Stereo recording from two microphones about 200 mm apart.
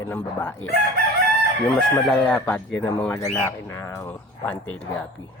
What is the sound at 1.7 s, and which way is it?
Crowing, centre (ahead or behind).